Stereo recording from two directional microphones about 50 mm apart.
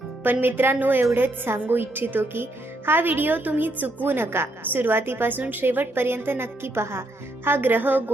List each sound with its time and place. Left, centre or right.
0.2 s speech: right
7.4 s speech: right